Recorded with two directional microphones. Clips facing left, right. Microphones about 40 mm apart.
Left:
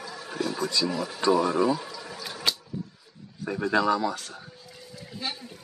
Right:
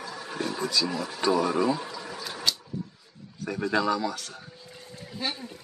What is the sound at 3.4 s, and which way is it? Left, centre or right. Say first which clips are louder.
Speech: left 2 dB; centre.